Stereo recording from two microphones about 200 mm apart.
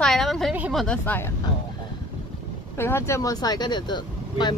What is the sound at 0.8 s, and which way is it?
Speech, 5° left (ahead or behind).